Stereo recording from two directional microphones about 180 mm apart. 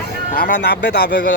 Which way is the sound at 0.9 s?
65° left (ahead or behind).